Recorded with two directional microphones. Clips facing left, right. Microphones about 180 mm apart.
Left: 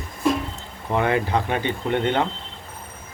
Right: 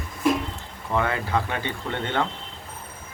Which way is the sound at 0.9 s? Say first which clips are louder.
Left 3 dB; 20° left (ahead or behind).